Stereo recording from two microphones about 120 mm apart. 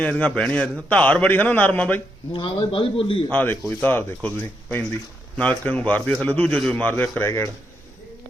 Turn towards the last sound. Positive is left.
turn(degrees=20)  # may be behind; listen again after turning